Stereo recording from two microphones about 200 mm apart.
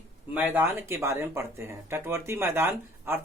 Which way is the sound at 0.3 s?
10° right (ahead or behind).